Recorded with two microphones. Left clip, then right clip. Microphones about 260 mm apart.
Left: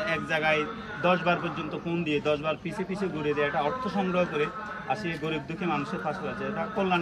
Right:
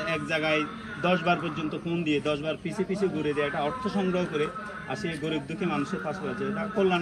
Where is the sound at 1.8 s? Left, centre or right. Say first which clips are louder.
Left 1 dB; centre.